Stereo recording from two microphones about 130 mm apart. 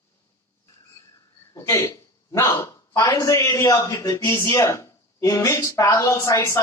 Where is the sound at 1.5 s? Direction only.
20° left (ahead or behind).